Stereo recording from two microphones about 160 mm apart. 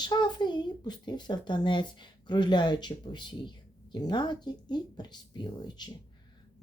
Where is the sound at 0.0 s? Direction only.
30° left (ahead or behind).